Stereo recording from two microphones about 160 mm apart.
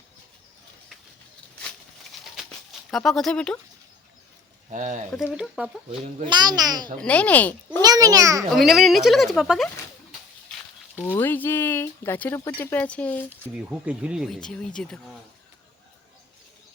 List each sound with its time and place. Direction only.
2.1 s a sound: centre (ahead or behind)
2.9 s speech: centre (ahead or behind)
4.7 s speech: 50° right (ahead or behind)
5.3 s speech: 5° right (ahead or behind)
6.2 s speech: 25° right (ahead or behind)
7.0 s speech: 10° left (ahead or behind)
7.8 s a child's voice: 25° right (ahead or behind)
8.5 s speech: centre (ahead or behind)
11.0 s speech: 10° left (ahead or behind)
13.3 s speech: 10° right (ahead or behind)